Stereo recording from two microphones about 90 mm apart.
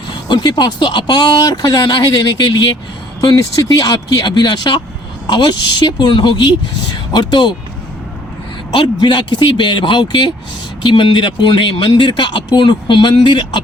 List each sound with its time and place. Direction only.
0.3 s speech: 55° left (ahead or behind)
8.7 s speech: 60° left (ahead or behind)